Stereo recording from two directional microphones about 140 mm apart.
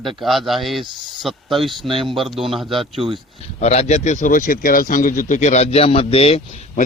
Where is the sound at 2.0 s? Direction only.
Centre (ahead or behind).